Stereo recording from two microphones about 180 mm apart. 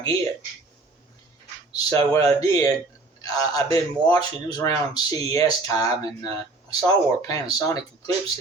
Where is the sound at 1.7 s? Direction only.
20° left (ahead or behind).